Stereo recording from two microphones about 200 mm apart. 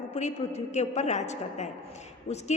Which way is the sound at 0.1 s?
35° left (ahead or behind).